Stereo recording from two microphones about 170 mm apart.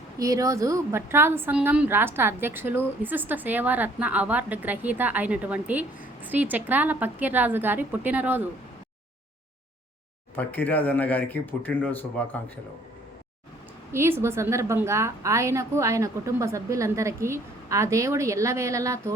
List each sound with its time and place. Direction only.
0.2 s a woman's voice: 20° right (ahead or behind)
10.3 s speech: 10° left (ahead or behind)
13.9 s a woman's voice: 15° right (ahead or behind)